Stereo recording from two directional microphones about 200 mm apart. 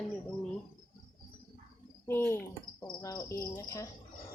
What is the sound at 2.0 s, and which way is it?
Cricket, 10° left (ahead or behind).